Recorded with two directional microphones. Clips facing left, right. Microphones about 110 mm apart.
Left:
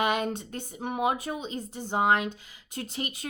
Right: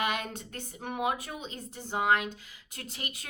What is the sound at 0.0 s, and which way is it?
A woman's voice, 25° left (ahead or behind).